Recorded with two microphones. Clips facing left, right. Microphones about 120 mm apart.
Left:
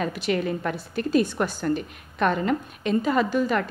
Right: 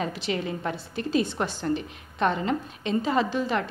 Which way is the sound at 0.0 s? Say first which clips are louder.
Left 4 dB; 25° right (ahead or behind).